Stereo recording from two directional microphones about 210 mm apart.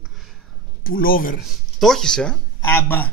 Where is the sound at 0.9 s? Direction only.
45° left (ahead or behind).